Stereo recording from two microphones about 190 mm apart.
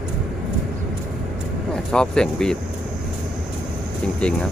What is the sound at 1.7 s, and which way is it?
Speech, 5° left (ahead or behind).